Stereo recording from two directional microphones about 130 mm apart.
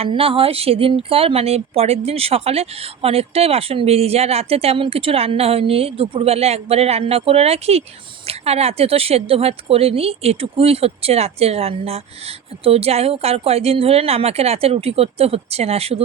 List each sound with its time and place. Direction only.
0.0 s speech: 45° right (ahead or behind)